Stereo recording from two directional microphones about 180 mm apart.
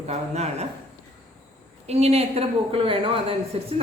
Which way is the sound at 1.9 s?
35° right (ahead or behind).